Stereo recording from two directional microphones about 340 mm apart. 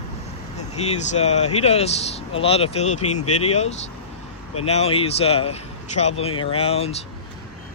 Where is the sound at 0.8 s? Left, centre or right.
Centre.